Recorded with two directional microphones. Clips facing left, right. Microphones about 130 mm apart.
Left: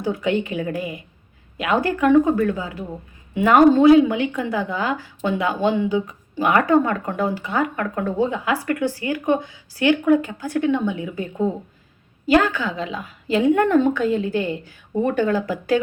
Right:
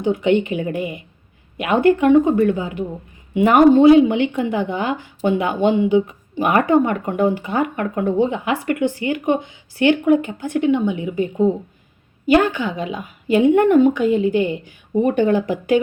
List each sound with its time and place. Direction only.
0.0 s a woman's voice: 20° right (ahead or behind)